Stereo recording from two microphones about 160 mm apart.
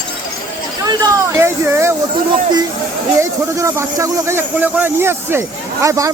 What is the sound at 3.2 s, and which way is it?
A man's voice, 20° right (ahead or behind).